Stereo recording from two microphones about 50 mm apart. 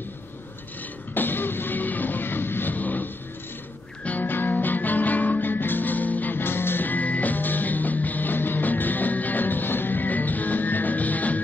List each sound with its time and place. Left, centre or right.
1.1 s music: left